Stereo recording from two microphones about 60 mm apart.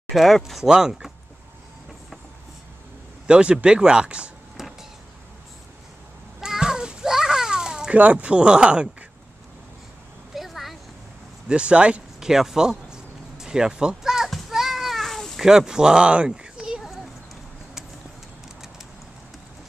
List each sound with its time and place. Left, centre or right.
0.1 s speech: centre
3.3 s speech: centre
4.6 s vehicle: centre
6.4 s children playing: centre
7.9 s speech: right
10.3 s a sound: centre
11.4 s a sound: centre
15.4 s speech: centre